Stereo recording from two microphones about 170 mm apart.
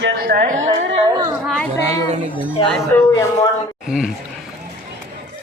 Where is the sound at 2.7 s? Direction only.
5° left (ahead or behind).